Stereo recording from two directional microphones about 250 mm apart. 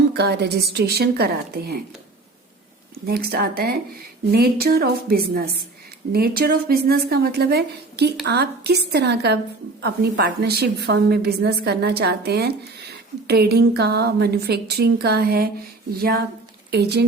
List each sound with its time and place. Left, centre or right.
0.1 s a woman's voice: right
3.1 s a woman's voice: right
16.7 s a woman's voice: right